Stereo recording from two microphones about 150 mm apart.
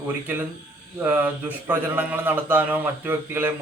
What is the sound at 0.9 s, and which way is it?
Speech, 10° right (ahead or behind).